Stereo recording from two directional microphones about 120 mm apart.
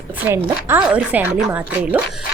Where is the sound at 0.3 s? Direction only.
15° right (ahead or behind).